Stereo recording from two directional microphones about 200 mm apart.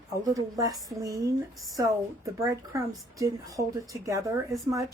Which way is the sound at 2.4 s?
15° right (ahead or behind).